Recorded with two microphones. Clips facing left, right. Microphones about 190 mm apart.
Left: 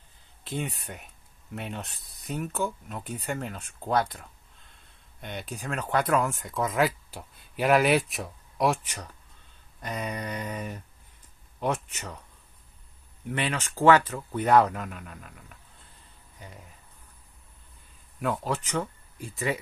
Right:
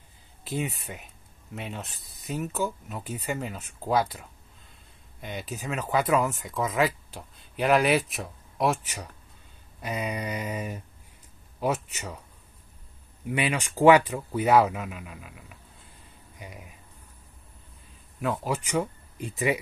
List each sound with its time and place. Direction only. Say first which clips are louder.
0.4 s speech: right 2 dB; 5° right (ahead or behind)
13.3 s speech: right 2 dB; 10° right (ahead or behind)
18.2 s speech: even; 5° right (ahead or behind)